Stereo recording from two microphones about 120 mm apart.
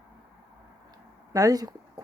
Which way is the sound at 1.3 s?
30° right (ahead or behind).